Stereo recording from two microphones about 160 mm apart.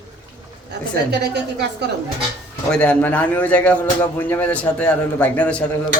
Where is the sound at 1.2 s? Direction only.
90° right.